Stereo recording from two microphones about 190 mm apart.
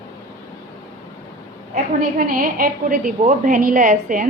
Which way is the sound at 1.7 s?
50° right (ahead or behind).